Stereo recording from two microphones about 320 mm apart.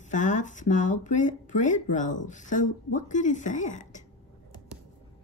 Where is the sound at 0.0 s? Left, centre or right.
Left.